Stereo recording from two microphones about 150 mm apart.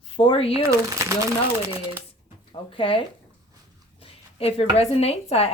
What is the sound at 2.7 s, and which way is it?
Speech, 35° left (ahead or behind).